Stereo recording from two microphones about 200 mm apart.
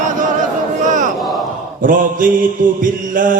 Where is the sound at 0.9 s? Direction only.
40° right (ahead or behind).